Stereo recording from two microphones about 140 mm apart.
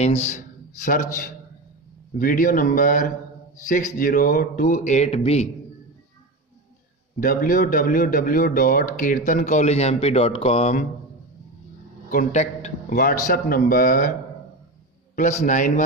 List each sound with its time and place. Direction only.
0.0 s a man's voice: 50° left (ahead or behind); by 1.3 s 65° left (ahead or behind)
2.1 s speech: 80° left; by 5.5 s 50° left (ahead or behind)
7.2 s speech: 80° left; by 10.7 s 45° left (ahead or behind)
12.1 s a man's voice: 65° left (ahead or behind)
13.0 s speech: 90° left
15.1 s a man's voice: 60° left (ahead or behind)